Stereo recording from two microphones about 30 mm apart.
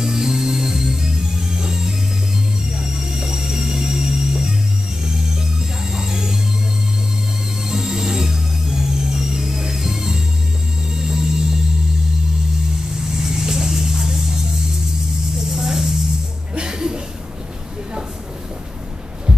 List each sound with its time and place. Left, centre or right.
0.0 s music: centre
5.9 s music: right
7.6 s music: centre
13.1 s vehicle: centre
15.5 s a sound: centre
16.5 s music: right